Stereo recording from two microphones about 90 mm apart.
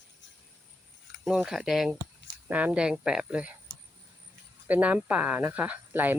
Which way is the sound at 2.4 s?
15° right (ahead or behind).